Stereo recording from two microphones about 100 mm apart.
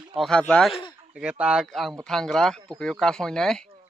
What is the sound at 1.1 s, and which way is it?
Speech, 10° right (ahead or behind).